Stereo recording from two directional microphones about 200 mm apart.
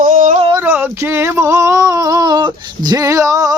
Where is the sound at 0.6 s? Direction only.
10° right (ahead or behind).